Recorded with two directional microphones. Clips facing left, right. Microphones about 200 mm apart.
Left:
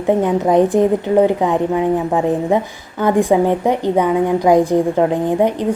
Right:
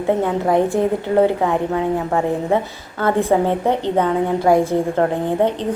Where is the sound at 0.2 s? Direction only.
15° left (ahead or behind).